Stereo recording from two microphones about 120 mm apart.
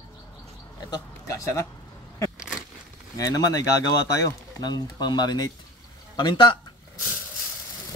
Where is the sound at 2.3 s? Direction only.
5° right (ahead or behind).